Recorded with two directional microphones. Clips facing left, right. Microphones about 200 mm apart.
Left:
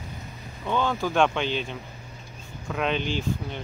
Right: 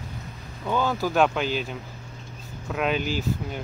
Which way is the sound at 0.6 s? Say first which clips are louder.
Right 1 dB; 5° right (ahead or behind).